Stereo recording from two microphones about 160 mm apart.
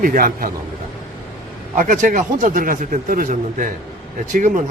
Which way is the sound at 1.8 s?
55° right (ahead or behind).